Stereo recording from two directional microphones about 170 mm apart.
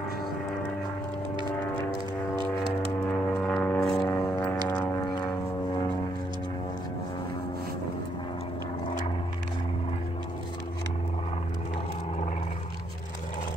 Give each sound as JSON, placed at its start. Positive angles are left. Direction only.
{"t": 3.1, "sound": "vehicle", "side_deg": 5}